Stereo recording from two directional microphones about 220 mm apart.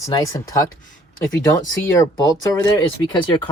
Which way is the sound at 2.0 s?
15° left (ahead or behind).